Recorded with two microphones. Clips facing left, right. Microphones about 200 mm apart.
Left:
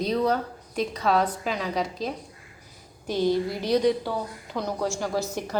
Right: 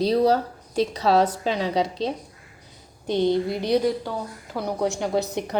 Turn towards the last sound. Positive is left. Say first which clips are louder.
# right 3 dB
turn(degrees=-20)  # may be behind; listen again after turning